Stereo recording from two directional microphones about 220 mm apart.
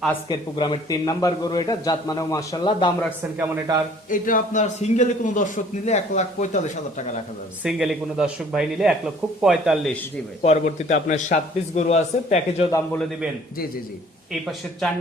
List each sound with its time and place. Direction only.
0.3 s a man's voice: 20° left (ahead or behind)
3.3 s speech: 10° right (ahead or behind)
4.1 s a man's voice: 35° left (ahead or behind)
7.6 s speech: 5° right (ahead or behind)
10.4 s a man's voice: 30° left (ahead or behind)
12.7 s a man's voice: 10° left (ahead or behind)